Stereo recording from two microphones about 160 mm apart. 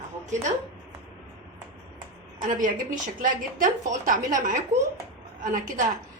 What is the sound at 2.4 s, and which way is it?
A woman's voice, 55° right (ahead or behind).